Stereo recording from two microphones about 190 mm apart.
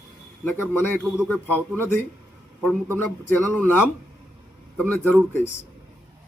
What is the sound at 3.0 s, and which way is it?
A man's voice, 10° left (ahead or behind).